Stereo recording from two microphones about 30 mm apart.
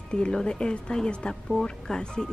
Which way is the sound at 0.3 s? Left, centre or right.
Left.